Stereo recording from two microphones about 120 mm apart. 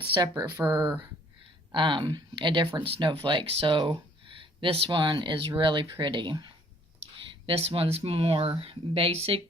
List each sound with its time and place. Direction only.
0.1 s speech: 30° right (ahead or behind)
1.7 s speech: 45° right (ahead or behind)
7.4 s speech: 50° right (ahead or behind)